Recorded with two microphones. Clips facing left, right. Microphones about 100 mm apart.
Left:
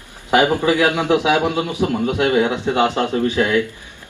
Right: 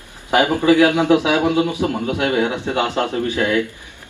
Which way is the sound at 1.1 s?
20° left (ahead or behind).